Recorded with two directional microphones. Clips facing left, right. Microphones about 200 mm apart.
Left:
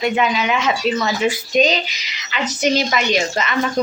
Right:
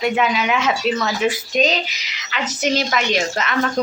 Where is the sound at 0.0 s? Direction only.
Centre (ahead or behind).